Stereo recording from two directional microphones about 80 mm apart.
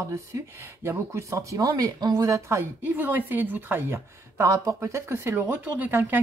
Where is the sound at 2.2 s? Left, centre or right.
Right.